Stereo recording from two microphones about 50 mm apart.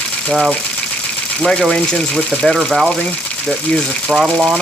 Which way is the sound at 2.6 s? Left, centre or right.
Centre.